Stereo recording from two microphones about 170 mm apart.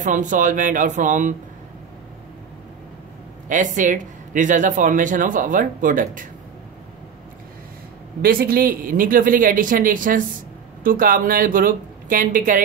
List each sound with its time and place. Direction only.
0.0 s speech: 50° right (ahead or behind)
3.4 s speech: 50° right (ahead or behind)
8.2 s speech: 60° right (ahead or behind)